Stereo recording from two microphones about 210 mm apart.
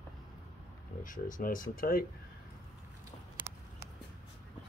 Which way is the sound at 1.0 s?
40° left (ahead or behind).